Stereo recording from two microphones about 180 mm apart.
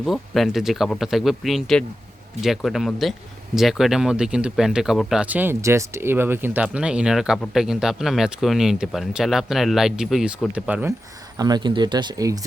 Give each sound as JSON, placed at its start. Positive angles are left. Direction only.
{"t": 0.0, "sound": "speech", "side_deg": 0}
{"t": 11.3, "sound": "speech", "side_deg": -25}